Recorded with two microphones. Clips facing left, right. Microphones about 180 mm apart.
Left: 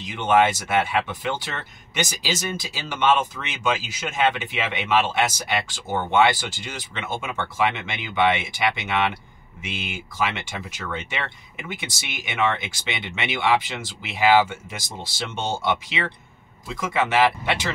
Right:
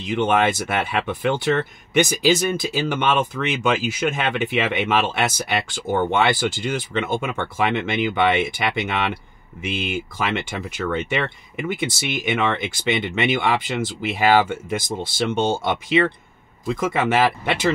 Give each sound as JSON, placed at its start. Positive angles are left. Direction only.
{"t": 0.0, "sound": "speech", "side_deg": -55}